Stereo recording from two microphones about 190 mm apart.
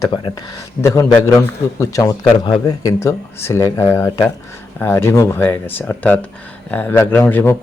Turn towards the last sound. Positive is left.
turn(degrees=15)  # may be behind; listen again after turning